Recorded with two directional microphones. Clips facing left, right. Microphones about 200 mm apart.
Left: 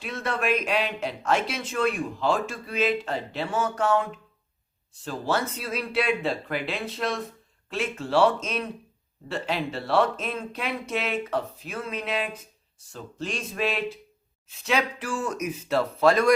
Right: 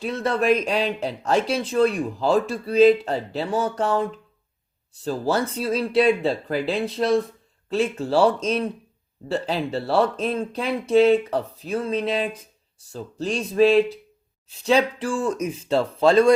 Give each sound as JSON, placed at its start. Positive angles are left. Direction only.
{"t": 0.0, "sound": "a man's voice", "side_deg": -35}
{"t": 5.0, "sound": "a man's voice", "side_deg": -35}